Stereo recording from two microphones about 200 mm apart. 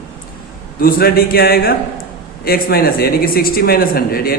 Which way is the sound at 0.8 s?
50° left (ahead or behind).